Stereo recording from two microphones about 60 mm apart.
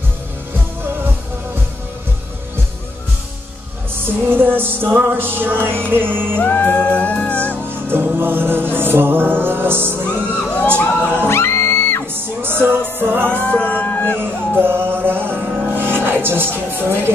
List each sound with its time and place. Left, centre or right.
4.0 s music: right
6.4 s music: left
7.9 s music: right
10.3 s a sound: left
11.2 s music: left
12.1 s music: right
13.4 s music: left
14.6 s music: right